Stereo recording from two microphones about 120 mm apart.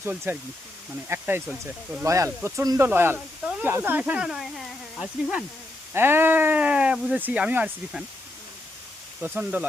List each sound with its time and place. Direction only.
0.0 s speech: 15° right (ahead or behind); by 5.3 s centre (ahead or behind)
5.9 s speech: 20° right (ahead or behind)
9.2 s speech: 15° right (ahead or behind)